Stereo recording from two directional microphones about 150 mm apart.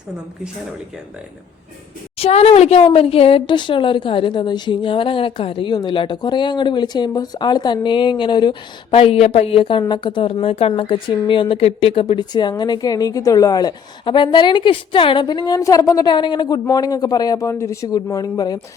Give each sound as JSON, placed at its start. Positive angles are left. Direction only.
{"t": 2.1, "sound": "a woman's voice", "side_deg": 40}